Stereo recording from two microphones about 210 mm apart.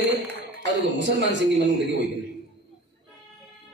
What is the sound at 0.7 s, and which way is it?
A man's voice, 55° right (ahead or behind).